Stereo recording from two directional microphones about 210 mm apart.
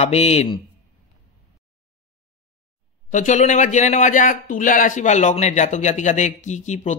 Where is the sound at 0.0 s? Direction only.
30° left (ahead or behind).